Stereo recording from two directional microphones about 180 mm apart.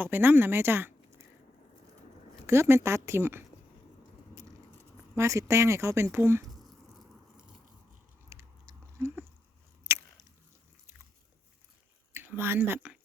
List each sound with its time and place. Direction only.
0.0 s speech: 10° right (ahead or behind)
2.5 s speech: 15° right (ahead or behind)
5.1 s speech: 15° right (ahead or behind)
6.8 s biting: centre (ahead or behind)
8.3 s biting: 15° right (ahead or behind)
9.0 s a sound: 15° right (ahead or behind)
12.1 s speech: 10° right (ahead or behind)